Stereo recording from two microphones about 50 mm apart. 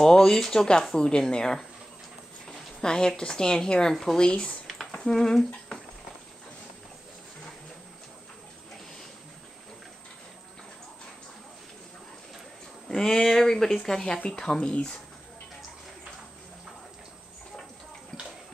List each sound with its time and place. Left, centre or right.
0.0 s speech: centre
3.9 s speech: centre
4.2 s speech: centre
4.9 s a sound: centre
12.8 s speech: centre